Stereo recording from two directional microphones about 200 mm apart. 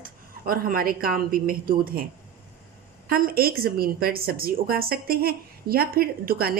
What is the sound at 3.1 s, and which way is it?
A woman's voice, 50° right (ahead or behind).